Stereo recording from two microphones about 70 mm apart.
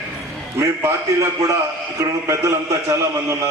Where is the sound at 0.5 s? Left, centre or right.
Right.